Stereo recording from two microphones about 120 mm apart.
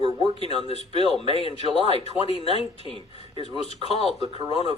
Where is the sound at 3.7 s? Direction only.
60° left (ahead or behind).